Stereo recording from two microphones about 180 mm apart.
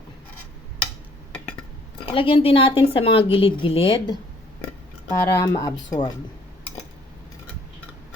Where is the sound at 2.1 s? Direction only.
30° left (ahead or behind).